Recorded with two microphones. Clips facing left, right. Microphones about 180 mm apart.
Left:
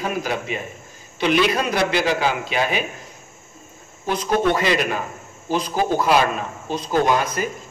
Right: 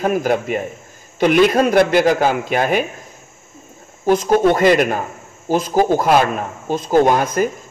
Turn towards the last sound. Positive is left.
turn(degrees=-50)  # may be behind; listen again after turning